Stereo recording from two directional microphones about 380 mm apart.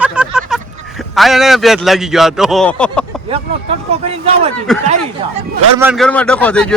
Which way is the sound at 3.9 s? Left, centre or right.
Centre.